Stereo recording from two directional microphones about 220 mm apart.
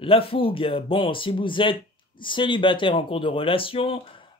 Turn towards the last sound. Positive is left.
turn(degrees=25)  # may be behind; listen again after turning